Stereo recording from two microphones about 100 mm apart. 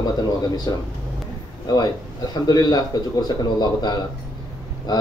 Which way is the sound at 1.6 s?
40° left (ahead or behind).